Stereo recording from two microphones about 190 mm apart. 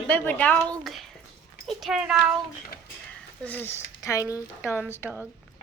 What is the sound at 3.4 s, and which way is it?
A woman's voice, 10° left (ahead or behind).